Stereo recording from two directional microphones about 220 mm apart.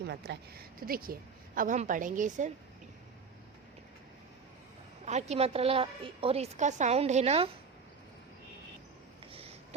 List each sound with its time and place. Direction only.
0.1 s a woman's voice: 45° right (ahead or behind)
5.0 s a woman's voice: 30° right (ahead or behind)
9.2 s a sound: 25° right (ahead or behind)